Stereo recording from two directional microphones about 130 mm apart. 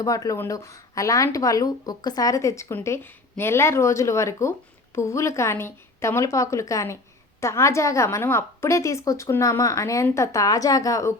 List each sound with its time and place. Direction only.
0.0 s speech: 25° left (ahead or behind)